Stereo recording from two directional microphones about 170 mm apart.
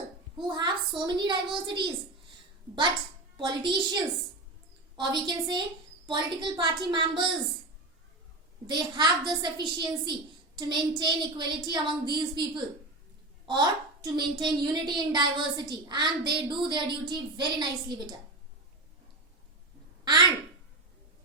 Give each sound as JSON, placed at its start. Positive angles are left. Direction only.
{"t": 0.4, "sound": "a child's voice", "side_deg": -25}
{"t": 3.3, "sound": "a child's voice", "side_deg": -30}
{"t": 8.6, "sound": "a child's voice", "side_deg": -25}
{"t": 20.1, "sound": "a woman's voice", "side_deg": -25}